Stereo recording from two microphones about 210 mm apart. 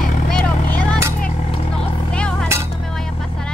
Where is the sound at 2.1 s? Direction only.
5° left (ahead or behind).